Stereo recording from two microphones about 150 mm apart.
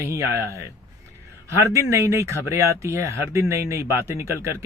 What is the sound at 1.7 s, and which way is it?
Speech, 20° right (ahead or behind).